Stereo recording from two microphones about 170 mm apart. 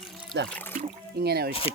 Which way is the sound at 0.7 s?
70° right (ahead or behind).